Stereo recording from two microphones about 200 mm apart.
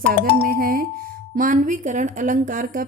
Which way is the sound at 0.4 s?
45° right (ahead or behind).